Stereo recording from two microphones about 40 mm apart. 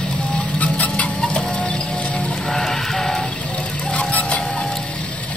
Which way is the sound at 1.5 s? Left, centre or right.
Left.